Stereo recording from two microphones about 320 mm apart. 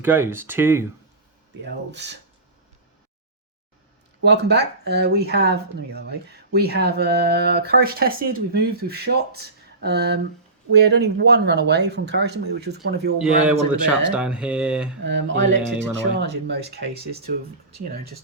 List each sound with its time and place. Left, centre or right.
0.0 s speech: centre
1.6 s speech: right
4.2 s speech: right
13.1 s speech: centre
15.0 s speech: right